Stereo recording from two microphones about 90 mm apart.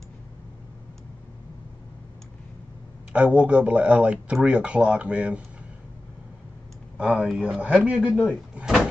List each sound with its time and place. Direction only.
3.1 s speech: 10° right (ahead or behind)
7.0 s speech: 5° right (ahead or behind)
8.1 s speech: 5° right (ahead or behind)
8.5 s door: 5° right (ahead or behind)